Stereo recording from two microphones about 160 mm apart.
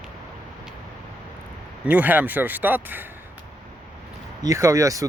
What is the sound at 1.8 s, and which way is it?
Speech, 10° right (ahead or behind).